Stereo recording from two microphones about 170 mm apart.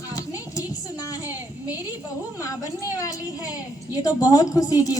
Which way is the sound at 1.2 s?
10° right (ahead or behind).